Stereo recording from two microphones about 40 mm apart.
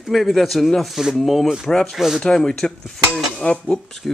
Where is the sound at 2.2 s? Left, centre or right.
Centre.